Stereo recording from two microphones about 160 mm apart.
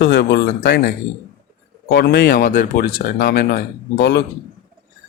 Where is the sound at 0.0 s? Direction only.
90° left.